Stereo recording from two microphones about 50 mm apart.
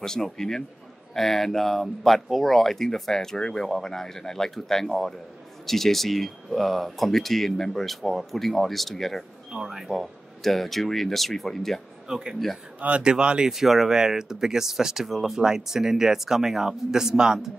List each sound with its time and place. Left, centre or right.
0.0 s speech: centre
9.5 s speech: centre
12.1 s speech: centre
13.5 s speech: centre